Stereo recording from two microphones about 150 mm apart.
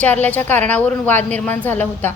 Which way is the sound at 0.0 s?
10° left (ahead or behind).